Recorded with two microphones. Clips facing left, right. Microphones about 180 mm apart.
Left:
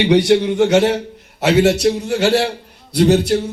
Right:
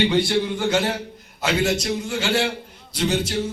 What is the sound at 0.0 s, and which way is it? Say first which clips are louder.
Speech: left 8 dB; 80° left.